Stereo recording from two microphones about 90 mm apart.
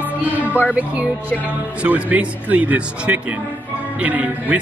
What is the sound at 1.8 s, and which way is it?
Speech, 15° right (ahead or behind).